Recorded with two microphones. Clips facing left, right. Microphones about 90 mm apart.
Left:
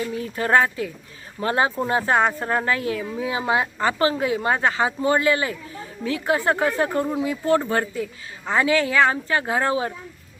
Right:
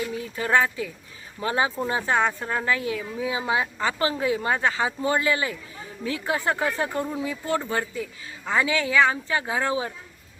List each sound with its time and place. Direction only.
0.0 s a woman's voice: 35° left (ahead or behind)